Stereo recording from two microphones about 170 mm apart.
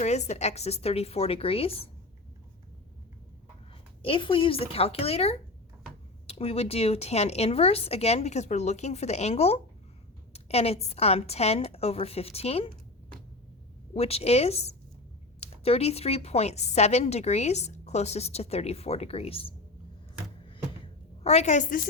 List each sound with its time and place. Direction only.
0.0 s a woman's voice: 40° left (ahead or behind)
4.0 s a woman's voice: 30° left (ahead or behind)
13.9 s a woman's voice: 35° left (ahead or behind)
21.2 s a woman's voice: 40° left (ahead or behind)